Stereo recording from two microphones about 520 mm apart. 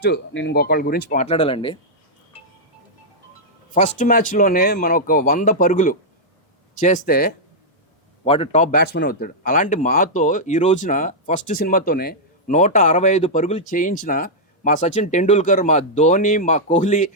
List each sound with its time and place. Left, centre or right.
0.0 s speech: centre
3.8 s speech: centre